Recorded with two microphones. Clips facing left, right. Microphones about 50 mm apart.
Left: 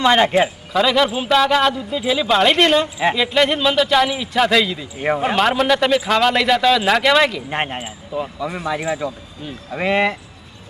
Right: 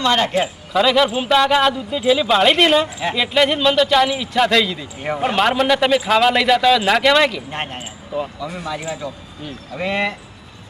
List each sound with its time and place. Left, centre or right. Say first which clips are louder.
0.0 s a man's voice: left 3 dB; centre
0.7 s a man's voice: right 3 dB; centre
7.5 s a man's voice: left 4 dB; left